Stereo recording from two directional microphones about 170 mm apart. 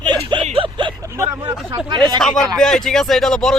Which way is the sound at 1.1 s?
15° right (ahead or behind).